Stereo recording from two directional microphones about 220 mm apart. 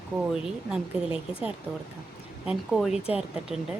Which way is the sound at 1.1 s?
25° left (ahead or behind).